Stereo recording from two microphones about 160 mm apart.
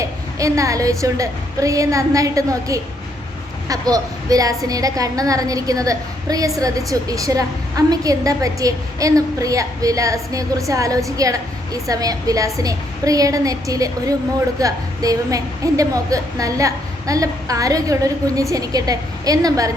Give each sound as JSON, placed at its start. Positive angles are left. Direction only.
{"t": 0.0, "sound": "a woman's voice", "side_deg": -20}